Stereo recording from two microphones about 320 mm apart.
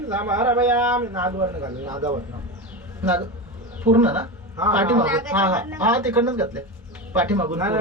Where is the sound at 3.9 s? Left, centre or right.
Centre.